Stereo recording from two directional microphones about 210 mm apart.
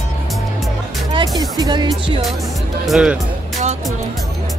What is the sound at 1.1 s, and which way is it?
Music, 20° right (ahead or behind).